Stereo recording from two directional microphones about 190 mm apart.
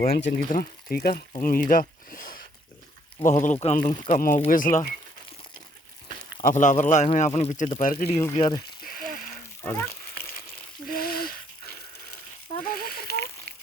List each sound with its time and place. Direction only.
0.0 s a man's voice: 55° left (ahead or behind); by 3.8 s 35° left (ahead or behind)
3.9 s speech: 25° left (ahead or behind)
4.4 s a man's voice: 45° left (ahead or behind)
6.5 s a man's voice: 40° left (ahead or behind)
8.1 s speech: 20° left (ahead or behind)
8.6 s a sound: 50° left (ahead or behind)
9.6 s speech: 10° left (ahead or behind)
10.8 s a sound: 50° left (ahead or behind)
12.6 s a sound: 50° left (ahead or behind)